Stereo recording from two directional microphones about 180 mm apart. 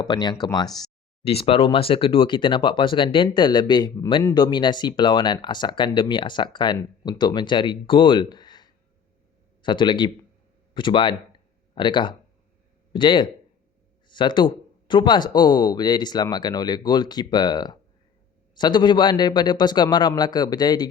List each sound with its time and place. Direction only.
0.0 s speech: 25° left (ahead or behind)
1.2 s speech: 35° left (ahead or behind)